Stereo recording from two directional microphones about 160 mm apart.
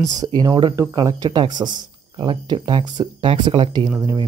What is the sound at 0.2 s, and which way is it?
Speech, 25° right (ahead or behind).